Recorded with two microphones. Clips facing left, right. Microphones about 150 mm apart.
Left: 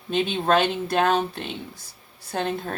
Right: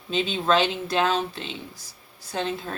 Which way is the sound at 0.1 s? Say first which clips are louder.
Left 1 dB; 60° left (ahead or behind).